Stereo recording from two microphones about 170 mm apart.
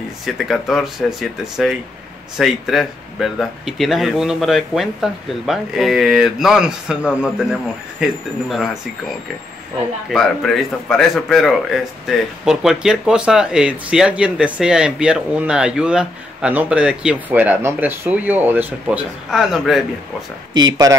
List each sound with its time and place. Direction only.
0.2 s a man's voice: centre (ahead or behind)
10.1 s a man's voice: centre (ahead or behind)
20.5 s speech: 25° right (ahead or behind)